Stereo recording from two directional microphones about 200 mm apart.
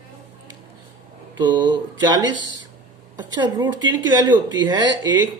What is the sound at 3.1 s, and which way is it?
Speech, 20° right (ahead or behind).